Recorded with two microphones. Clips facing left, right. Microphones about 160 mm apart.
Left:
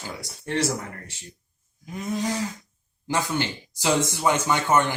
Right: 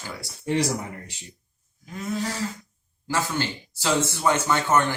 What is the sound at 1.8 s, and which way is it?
Speech, 20° left (ahead or behind).